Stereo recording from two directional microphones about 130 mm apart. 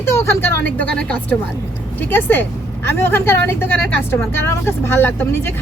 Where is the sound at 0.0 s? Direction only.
20° left (ahead or behind).